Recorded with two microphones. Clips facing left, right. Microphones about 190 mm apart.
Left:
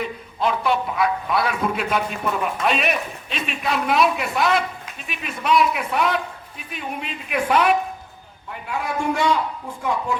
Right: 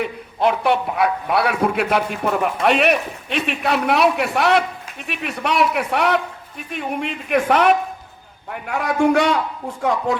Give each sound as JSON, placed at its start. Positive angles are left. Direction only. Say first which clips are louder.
{"t": 0.0, "sound": "a man's voice", "louder": "right 4 dB", "side_deg": -65}
{"t": 6.7, "sound": "speech", "louder": "right 6 dB", "side_deg": -55}
{"t": 8.4, "sound": "a man's voice", "louder": "right 4 dB", "side_deg": -65}